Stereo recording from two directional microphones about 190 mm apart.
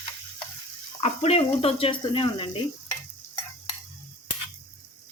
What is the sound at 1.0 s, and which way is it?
Speech, 35° left (ahead or behind).